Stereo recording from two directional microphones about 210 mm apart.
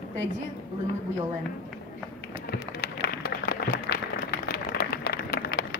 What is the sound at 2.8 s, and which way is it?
Applause, 45° left (ahead or behind).